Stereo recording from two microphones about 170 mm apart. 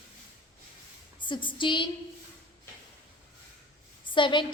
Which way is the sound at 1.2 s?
30° left (ahead or behind).